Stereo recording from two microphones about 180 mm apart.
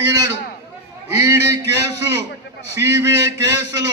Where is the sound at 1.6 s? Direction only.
70° right (ahead or behind).